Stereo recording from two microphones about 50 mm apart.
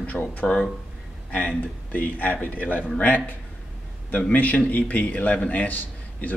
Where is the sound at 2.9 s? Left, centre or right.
Left.